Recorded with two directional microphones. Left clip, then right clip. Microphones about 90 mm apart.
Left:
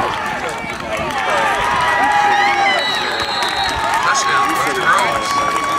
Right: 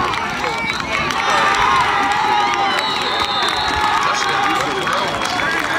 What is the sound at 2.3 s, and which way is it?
Crowd, 30° left (ahead or behind).